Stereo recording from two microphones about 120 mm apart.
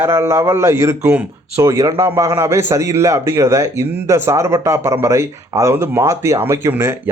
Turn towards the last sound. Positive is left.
turn(degrees=-20)  # may be behind; listen again after turning